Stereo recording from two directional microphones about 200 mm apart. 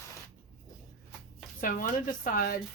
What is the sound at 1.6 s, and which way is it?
Speech, 45° left (ahead or behind).